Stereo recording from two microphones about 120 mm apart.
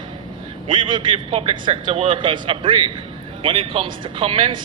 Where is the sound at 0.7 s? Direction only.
45° right (ahead or behind).